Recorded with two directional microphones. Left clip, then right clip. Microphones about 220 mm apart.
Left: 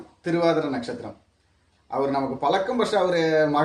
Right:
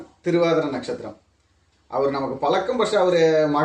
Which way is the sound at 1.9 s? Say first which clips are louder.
Right 2 dB; 10° left (ahead or behind).